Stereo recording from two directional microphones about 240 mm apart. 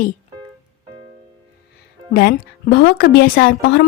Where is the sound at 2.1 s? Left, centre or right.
Left.